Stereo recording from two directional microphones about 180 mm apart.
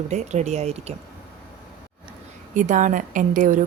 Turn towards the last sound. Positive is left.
turn(degrees=-45)  # may be behind; listen again after turning